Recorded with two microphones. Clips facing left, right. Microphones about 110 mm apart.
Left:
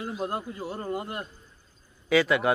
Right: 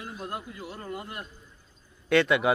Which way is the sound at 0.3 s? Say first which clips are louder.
Left 4 dB; 30° left (ahead or behind).